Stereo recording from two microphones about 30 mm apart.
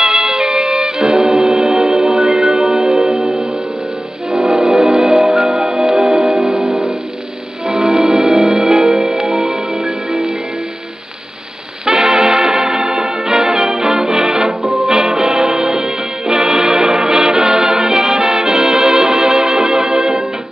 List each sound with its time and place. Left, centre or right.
0.0 s music: centre
11.8 s music: right
14.6 s music: centre
14.9 s music: right